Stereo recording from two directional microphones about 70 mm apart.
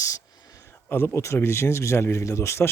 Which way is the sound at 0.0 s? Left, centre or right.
Left.